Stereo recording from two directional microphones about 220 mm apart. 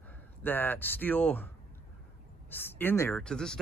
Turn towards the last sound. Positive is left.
turn(degrees=5)  # may be behind; listen again after turning